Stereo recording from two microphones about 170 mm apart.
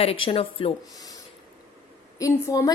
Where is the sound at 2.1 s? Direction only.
20° left (ahead or behind).